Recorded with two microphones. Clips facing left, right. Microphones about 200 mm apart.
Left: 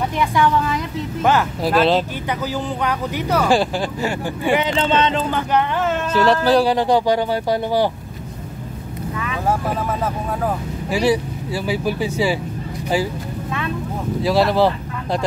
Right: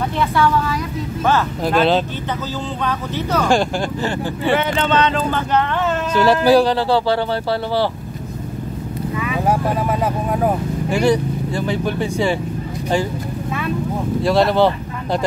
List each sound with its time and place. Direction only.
0.2 s speech: 15° left (ahead or behind)
1.6 s speech: 5° left (ahead or behind)
2.8 s speech: 15° left (ahead or behind)
4.7 s speech: 25° left (ahead or behind)
5.5 s speech: centre (ahead or behind)
6.6 s speech: 15° left (ahead or behind)
9.1 s speech: 10° right (ahead or behind)
10.9 s speech: 5° left (ahead or behind)
14.2 s speech: centre (ahead or behind)